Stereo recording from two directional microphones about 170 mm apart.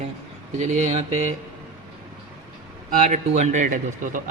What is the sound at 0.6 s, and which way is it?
Speech, 45° right (ahead or behind).